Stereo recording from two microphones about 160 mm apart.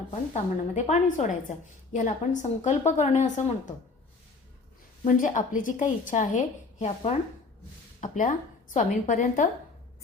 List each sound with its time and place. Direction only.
0.1 s speech: 45° left (ahead or behind)
5.0 s speech: 55° left (ahead or behind)
8.0 s speech: 55° left (ahead or behind)